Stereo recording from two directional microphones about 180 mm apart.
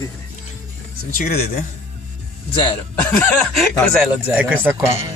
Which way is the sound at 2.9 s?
10° left (ahead or behind).